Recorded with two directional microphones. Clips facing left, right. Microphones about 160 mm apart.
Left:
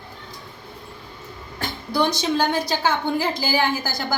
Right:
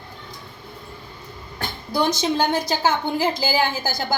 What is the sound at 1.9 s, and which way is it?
A woman's voice, 15° right (ahead or behind).